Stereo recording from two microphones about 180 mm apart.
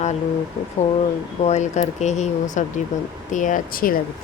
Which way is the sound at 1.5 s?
40° left (ahead or behind).